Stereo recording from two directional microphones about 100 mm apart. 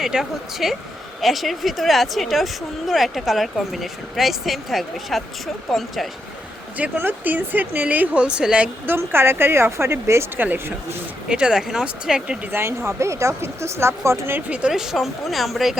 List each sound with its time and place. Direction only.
0.0 s speech: 5° right (ahead or behind)
6.7 s speech: 15° right (ahead or behind)
9.0 s speech: 25° right (ahead or behind); by 12.4 s 5° right (ahead or behind)
12.5 s speech: 25° right (ahead or behind)
14.5 s speech: 10° right (ahead or behind)